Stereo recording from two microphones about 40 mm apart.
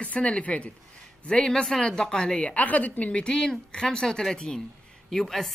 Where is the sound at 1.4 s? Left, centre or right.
Centre.